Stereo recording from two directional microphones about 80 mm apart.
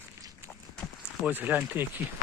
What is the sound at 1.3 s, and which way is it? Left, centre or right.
Speech, right.